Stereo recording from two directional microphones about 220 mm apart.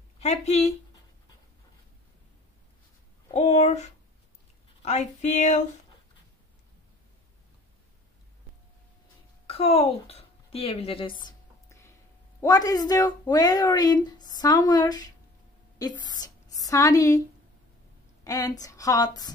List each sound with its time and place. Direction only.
0.2 s speech: 30° left (ahead or behind)
3.3 s a woman's voice: 30° left (ahead or behind)
9.5 s a woman's voice: 25° left (ahead or behind)
18.2 s a woman's voice: 15° left (ahead or behind)